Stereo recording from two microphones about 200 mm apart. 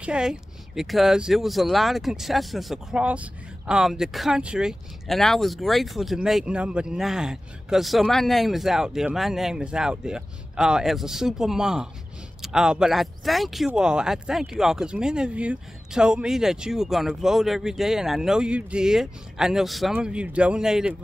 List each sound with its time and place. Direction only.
0.0 s speech: 5° right (ahead or behind)